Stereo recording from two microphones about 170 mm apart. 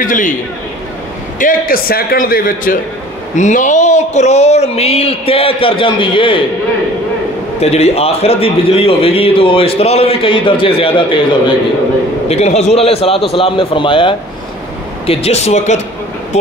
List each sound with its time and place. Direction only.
0.0 s speech: 50° left (ahead or behind)
1.4 s a man's voice: 60° left (ahead or behind); by 6.4 s 30° left (ahead or behind)
7.6 s speech: 40° left (ahead or behind)
12.3 s speech: 40° left (ahead or behind)